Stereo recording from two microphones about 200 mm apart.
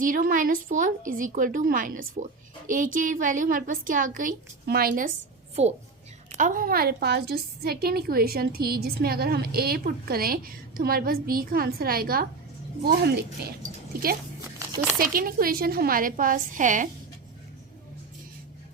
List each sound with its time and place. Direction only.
0.0 s a woman's voice: 45° right (ahead or behind)
5.6 s a woman's voice: 30° right (ahead or behind); by 14.2 s 50° right (ahead or behind)
14.7 s speech: 10° right (ahead or behind)
14.9 s a woman's voice: 45° right (ahead or behind)